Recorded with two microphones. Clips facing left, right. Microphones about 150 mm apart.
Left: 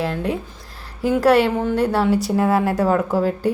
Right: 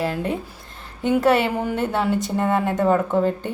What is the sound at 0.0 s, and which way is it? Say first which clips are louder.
A woman's voice: left 1 dB; centre (ahead or behind).